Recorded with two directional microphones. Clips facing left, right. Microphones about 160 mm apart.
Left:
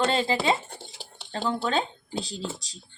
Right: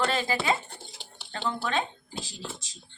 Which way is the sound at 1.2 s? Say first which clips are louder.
Left 4 dB; 30° left (ahead or behind).